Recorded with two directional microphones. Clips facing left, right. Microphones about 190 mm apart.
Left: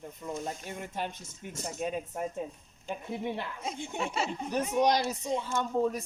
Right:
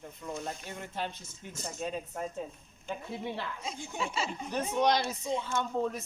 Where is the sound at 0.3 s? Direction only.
45° left (ahead or behind).